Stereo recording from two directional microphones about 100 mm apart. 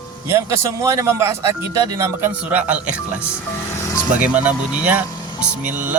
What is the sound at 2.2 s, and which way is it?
Speech, 15° right (ahead or behind).